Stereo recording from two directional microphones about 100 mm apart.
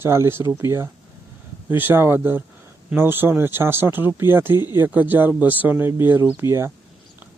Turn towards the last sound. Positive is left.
turn(degrees=-25)  # may be behind; listen again after turning